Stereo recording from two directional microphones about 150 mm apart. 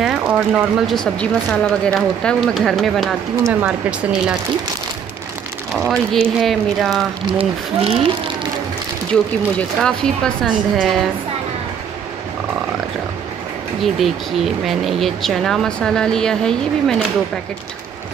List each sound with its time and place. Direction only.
0.0 s speech: 5° right (ahead or behind)
5.7 s speech: centre (ahead or behind)
7.3 s speech: 40° right (ahead or behind)
9.8 s speech: 5° left (ahead or behind)
13.9 s speech: centre (ahead or behind)